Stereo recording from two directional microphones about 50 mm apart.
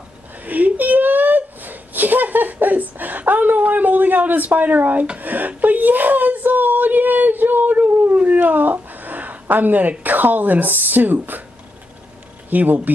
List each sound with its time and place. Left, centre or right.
0.4 s whimper: right
5.2 s a sound: right
12.4 s speech: right